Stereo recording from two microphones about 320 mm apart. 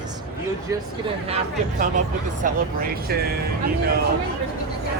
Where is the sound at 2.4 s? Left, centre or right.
Right.